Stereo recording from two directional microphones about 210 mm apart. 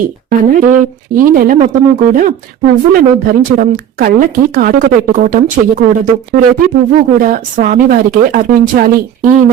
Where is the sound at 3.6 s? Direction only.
40° right (ahead or behind).